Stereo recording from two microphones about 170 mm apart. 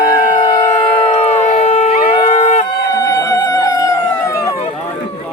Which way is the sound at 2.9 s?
20° left (ahead or behind).